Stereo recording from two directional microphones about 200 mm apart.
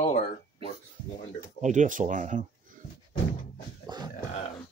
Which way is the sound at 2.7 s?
40° right (ahead or behind).